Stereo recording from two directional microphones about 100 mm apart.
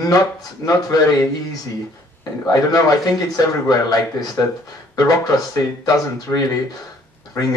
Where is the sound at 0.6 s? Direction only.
35° left (ahead or behind).